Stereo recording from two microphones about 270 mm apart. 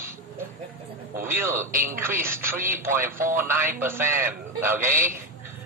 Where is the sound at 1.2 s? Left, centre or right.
Centre.